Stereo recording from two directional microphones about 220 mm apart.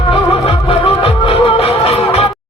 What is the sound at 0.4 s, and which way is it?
Music, 25° left (ahead or behind).